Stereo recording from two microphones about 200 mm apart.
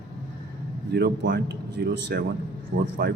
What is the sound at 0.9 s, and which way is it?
A man's voice, 60° right (ahead or behind).